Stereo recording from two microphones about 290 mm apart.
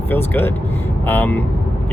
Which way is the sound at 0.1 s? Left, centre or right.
Centre.